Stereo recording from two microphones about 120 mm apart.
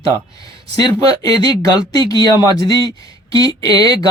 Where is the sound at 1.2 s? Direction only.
35° left (ahead or behind).